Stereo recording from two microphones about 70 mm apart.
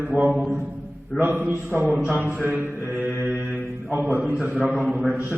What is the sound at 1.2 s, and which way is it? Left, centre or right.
A man's voice, right.